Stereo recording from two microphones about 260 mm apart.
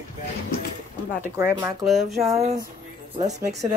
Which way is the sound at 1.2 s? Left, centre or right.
Centre.